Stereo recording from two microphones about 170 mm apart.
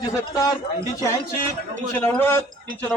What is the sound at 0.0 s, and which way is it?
Speech, 20° left (ahead or behind).